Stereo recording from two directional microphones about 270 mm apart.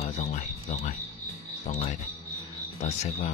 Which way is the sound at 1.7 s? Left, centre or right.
Left.